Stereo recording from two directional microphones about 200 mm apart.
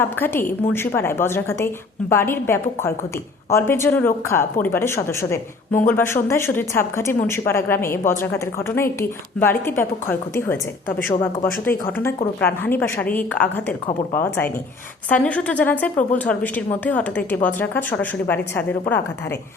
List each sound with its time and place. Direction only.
0.0 s a woman's voice: 10° left (ahead or behind)